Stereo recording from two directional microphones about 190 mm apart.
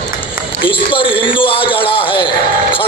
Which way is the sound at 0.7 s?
25° left (ahead or behind).